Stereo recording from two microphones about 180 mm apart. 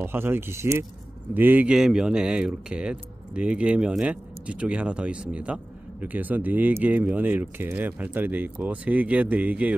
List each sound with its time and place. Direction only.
0.0 s speech: 10° right (ahead or behind)